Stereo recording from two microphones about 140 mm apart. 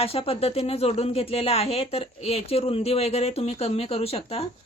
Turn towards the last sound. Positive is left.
turn(degrees=45)  # may be behind; listen again after turning